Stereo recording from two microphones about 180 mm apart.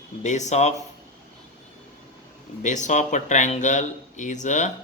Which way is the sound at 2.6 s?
40° left (ahead or behind).